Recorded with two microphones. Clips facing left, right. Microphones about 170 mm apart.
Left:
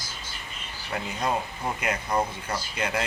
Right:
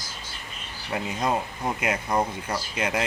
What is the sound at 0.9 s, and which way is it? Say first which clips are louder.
Speech: right 2 dB; 10° right (ahead or behind).